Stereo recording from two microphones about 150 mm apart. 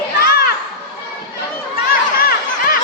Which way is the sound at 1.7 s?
85° left.